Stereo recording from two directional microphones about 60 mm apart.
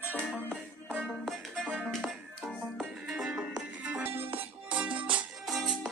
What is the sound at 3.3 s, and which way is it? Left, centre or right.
Music, centre.